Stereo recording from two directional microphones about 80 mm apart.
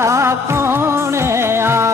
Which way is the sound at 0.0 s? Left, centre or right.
Right.